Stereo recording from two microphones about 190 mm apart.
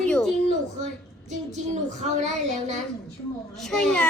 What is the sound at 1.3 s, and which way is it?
Speech, 40° right (ahead or behind).